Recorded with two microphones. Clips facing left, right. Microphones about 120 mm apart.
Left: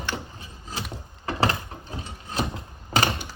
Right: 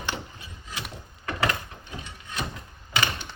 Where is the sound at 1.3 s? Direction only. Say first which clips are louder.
Left 3 dB; 30° left (ahead or behind).